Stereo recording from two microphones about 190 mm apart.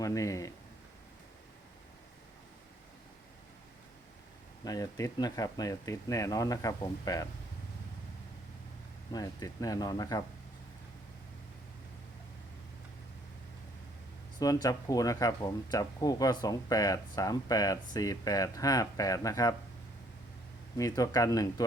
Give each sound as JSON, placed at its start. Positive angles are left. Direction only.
{"t": 0.0, "sound": "speech", "side_deg": 15}
{"t": 4.6, "sound": "speech", "side_deg": 20}
{"t": 9.1, "sound": "speech", "side_deg": 20}
{"t": 14.3, "sound": "speech", "side_deg": 20}
{"t": 20.7, "sound": "speech", "side_deg": 20}